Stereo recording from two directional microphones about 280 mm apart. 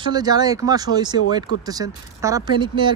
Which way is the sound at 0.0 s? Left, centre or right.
Centre.